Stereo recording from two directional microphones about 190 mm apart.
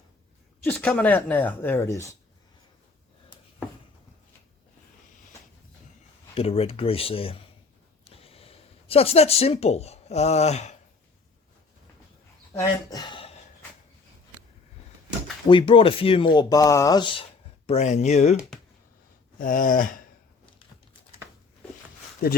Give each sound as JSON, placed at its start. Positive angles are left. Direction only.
{"t": 0.6, "sound": "speech", "side_deg": 10}
{"t": 6.3, "sound": "speech", "side_deg": 30}
{"t": 12.9, "sound": "speech", "side_deg": 25}
{"t": 15.4, "sound": "speech", "side_deg": 25}
{"t": 17.7, "sound": "speech", "side_deg": 35}
{"t": 19.4, "sound": "a sound", "side_deg": 45}